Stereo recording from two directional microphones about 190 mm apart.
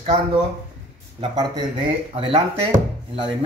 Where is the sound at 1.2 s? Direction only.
25° right (ahead or behind).